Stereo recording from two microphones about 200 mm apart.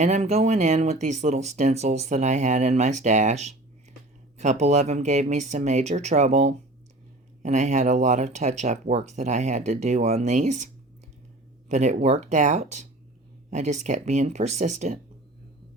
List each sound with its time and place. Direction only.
0.0 s speech: 35° right (ahead or behind)
11.7 s speech: 35° right (ahead or behind)